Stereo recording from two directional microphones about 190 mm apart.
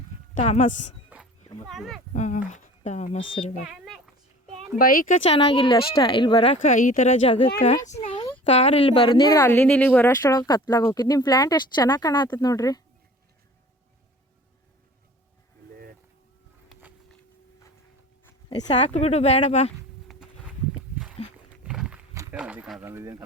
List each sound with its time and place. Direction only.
0.3 s speech: 40° left (ahead or behind)
1.1 s dog: centre (ahead or behind)
2.1 s speech: 40° left (ahead or behind)
3.7 s a sound: centre (ahead or behind)
4.8 s speech: 50° left (ahead or behind)
5.2 s speech: 30° left (ahead or behind)
6.6 s speech: 45° left (ahead or behind); by 9.4 s 25° left (ahead or behind)
9.4 s speech: 10° left (ahead or behind)
16.6 s a sound: centre (ahead or behind)
18.4 s speech: 35° left (ahead or behind)
21.2 s wild animals: 35° left (ahead or behind)
21.6 s a sound: 5° right (ahead or behind)
22.1 s run: 15° right (ahead or behind)
22.4 s speech: 5° right (ahead or behind)